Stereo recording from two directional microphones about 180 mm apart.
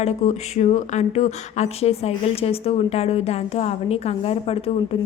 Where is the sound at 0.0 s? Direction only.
40° left (ahead or behind).